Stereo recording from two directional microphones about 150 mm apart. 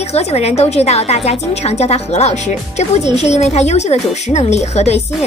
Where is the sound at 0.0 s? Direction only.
45° left (ahead or behind).